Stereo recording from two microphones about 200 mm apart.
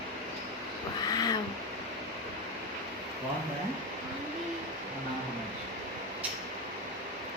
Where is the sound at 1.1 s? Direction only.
20° left (ahead or behind).